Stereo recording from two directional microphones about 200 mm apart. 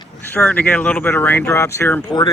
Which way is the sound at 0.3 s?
10° left (ahead or behind).